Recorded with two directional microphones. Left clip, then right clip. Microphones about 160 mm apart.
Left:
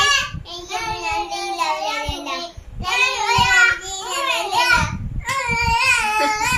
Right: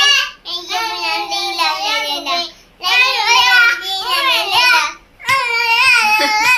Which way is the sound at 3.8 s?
15° left (ahead or behind).